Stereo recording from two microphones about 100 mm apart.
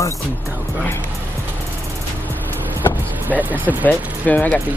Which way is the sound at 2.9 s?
20° right (ahead or behind).